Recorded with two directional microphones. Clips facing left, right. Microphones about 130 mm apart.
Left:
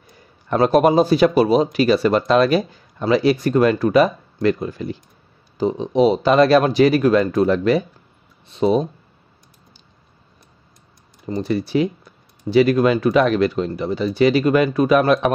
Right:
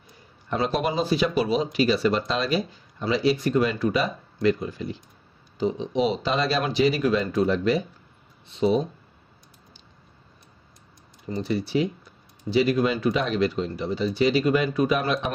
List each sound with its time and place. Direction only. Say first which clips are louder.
0.5 s speech: left 10 dB; 50° left (ahead or behind)
5.6 s speech: left 7 dB; 45° left (ahead or behind)
8.5 s speech: left 5 dB; 50° left (ahead or behind)
11.4 s speech: left 5 dB; 55° left (ahead or behind)